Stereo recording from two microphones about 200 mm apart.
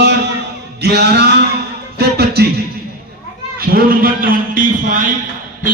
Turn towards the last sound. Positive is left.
turn(degrees=-40)  # may be behind; listen again after turning